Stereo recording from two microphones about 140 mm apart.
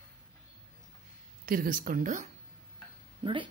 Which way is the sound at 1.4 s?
85° right.